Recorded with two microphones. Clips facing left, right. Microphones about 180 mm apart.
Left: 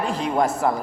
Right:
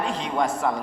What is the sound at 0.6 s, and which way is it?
Speech, 40° left (ahead or behind).